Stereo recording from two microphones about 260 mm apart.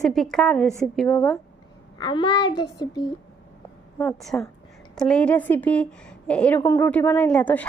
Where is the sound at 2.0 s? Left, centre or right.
Centre.